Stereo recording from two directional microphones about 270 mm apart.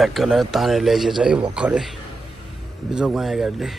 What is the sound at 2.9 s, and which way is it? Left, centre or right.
Speech, centre.